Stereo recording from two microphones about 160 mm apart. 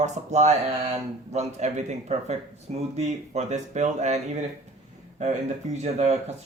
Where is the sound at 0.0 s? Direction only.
45° right (ahead or behind).